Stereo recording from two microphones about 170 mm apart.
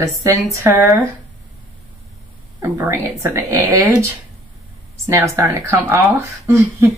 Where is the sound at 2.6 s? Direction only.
15° right (ahead or behind).